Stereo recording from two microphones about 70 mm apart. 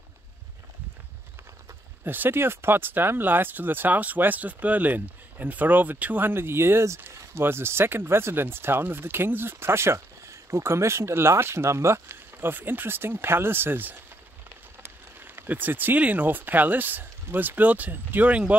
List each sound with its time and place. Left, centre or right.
2.0 s speech: right